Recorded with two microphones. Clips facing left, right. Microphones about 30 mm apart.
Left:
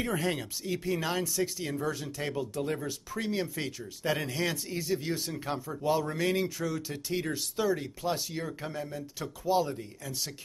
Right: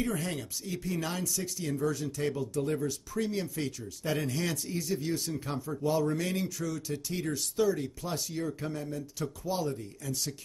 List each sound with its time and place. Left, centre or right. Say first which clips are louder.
0.0 s speech: left 2 dB; centre